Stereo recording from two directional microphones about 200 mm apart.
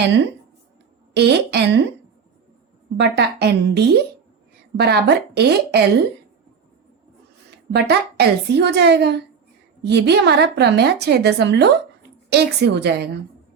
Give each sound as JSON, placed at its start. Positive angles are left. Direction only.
{"t": 1.1, "sound": "a woman's voice", "side_deg": -55}
{"t": 3.0, "sound": "a woman's voice", "side_deg": -55}
{"t": 7.7, "sound": "a woman's voice", "side_deg": -55}